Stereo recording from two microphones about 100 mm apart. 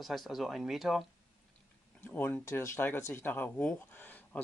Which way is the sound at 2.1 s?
20° left (ahead or behind).